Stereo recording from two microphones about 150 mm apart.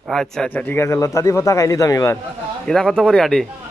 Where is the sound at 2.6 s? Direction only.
5° left (ahead or behind).